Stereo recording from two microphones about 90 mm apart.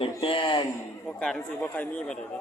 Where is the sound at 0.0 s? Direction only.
75° left (ahead or behind).